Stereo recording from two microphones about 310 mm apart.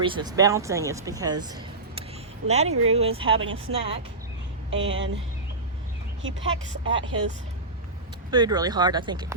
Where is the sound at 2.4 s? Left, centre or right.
Right.